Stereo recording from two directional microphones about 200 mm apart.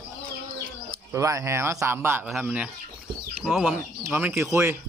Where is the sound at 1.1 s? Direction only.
15° right (ahead or behind).